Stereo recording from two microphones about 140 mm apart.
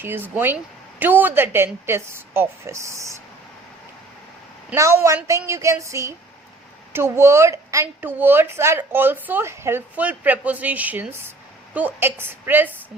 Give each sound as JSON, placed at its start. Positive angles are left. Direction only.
{"t": 0.0, "sound": "a woman's voice", "side_deg": -15}
{"t": 4.7, "sound": "a woman's voice", "side_deg": -20}